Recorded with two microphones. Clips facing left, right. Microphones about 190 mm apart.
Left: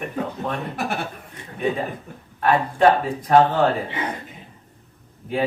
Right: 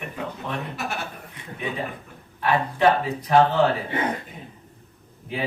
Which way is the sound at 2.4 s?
45° left (ahead or behind).